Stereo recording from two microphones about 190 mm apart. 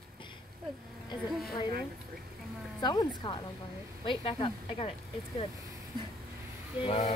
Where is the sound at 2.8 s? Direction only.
20° left (ahead or behind).